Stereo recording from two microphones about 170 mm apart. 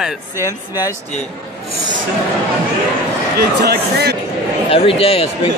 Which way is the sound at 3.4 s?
70° right (ahead or behind).